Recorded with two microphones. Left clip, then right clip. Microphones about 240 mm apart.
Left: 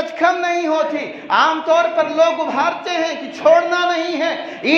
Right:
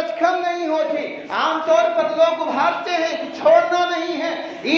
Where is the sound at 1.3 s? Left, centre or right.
Left.